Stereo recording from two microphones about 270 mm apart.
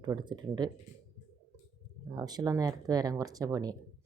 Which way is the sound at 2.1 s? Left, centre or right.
Centre.